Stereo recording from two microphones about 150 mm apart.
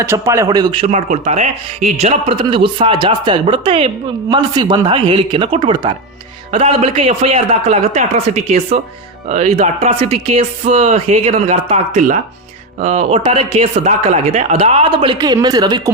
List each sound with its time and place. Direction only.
0.0 s a man's voice: 20° right (ahead or behind)
0.9 s speech: 50° right (ahead or behind); by 15.8 s 25° right (ahead or behind)